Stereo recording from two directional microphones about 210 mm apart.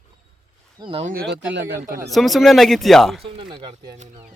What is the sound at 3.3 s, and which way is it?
Speech, 25° right (ahead or behind).